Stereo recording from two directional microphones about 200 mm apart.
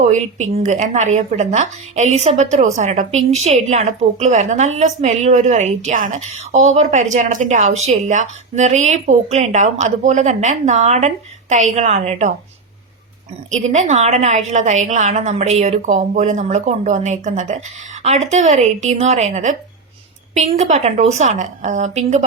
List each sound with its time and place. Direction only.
0.1 s a woman's voice: 35° right (ahead or behind)
13.5 s a woman's voice: 35° right (ahead or behind)